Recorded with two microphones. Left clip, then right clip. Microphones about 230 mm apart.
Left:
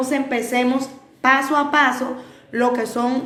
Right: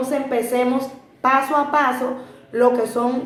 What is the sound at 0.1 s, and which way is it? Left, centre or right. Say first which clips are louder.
A woman's voice: even; left.